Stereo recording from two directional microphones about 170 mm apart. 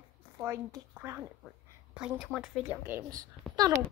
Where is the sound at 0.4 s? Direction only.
15° right (ahead or behind).